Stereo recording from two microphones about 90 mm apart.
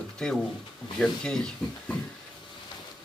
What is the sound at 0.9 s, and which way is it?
Speech, 10° left (ahead or behind).